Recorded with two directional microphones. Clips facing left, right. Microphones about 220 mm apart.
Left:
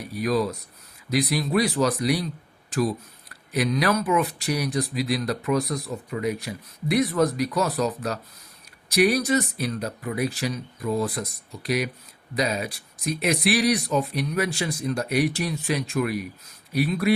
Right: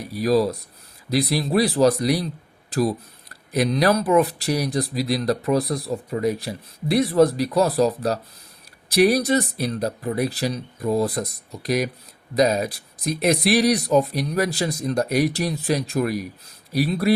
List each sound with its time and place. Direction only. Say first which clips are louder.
0.1 s speech: right 5 dB; 35° right (ahead or behind)